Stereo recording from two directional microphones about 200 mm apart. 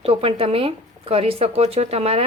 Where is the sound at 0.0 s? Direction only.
30° right (ahead or behind).